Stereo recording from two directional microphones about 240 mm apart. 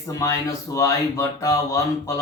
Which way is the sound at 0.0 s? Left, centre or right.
Centre.